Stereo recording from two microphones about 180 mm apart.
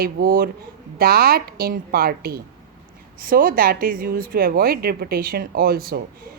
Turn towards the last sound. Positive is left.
turn(degrees=-55)  # may be behind; listen again after turning